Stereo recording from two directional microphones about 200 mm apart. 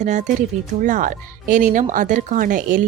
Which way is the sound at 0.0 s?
35° right (ahead or behind).